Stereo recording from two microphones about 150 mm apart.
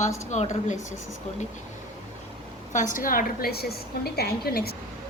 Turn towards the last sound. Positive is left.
turn(degrees=90)